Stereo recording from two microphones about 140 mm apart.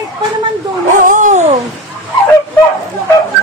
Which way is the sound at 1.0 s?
65° right (ahead or behind).